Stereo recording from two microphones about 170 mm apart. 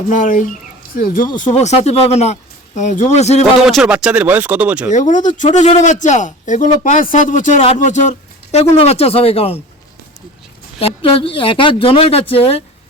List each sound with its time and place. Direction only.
0.1 s a man's voice: 50° left (ahead or behind)
1.4 s speech: 45° left (ahead or behind)
3.4 s speech: 5° right (ahead or behind)
4.9 s a man's voice: 45° left (ahead or behind)
10.8 s speech: 35° left (ahead or behind)